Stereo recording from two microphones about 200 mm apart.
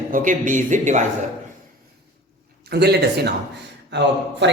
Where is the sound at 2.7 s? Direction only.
55° right (ahead or behind).